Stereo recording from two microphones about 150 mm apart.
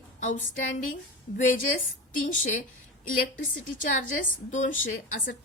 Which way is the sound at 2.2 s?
60° left (ahead or behind).